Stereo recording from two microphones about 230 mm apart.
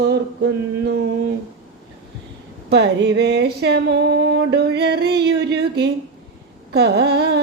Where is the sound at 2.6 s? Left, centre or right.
Right.